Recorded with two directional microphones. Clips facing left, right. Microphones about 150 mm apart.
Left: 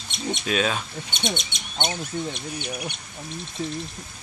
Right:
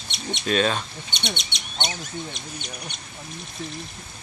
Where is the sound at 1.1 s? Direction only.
50° left (ahead or behind).